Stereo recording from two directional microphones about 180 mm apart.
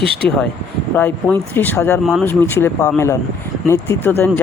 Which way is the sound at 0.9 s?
10° left (ahead or behind).